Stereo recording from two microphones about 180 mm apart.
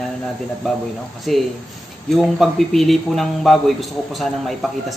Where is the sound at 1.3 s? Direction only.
Centre (ahead or behind).